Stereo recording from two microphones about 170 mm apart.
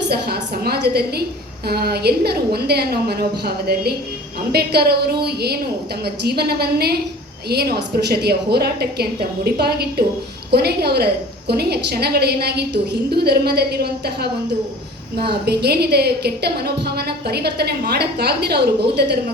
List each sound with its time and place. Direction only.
0.1 s a woman's voice: 65° right (ahead or behind)